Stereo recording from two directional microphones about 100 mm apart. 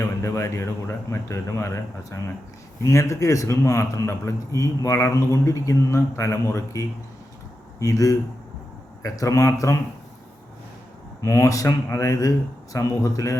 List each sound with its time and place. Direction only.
0.2 s a man's voice: 30° left (ahead or behind)
11.2 s a man's voice: 35° left (ahead or behind)